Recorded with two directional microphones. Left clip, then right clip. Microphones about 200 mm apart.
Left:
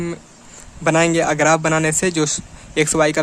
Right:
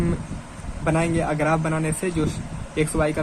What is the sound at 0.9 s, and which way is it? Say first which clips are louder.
A man's voice: left 7 dB; 45° left (ahead or behind).